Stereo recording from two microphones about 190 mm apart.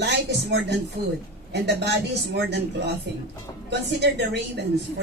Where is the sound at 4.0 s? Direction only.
65° right (ahead or behind).